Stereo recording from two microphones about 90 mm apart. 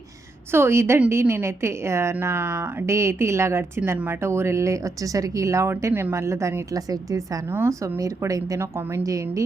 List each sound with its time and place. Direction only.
0.5 s a woman's voice: 30° right (ahead or behind)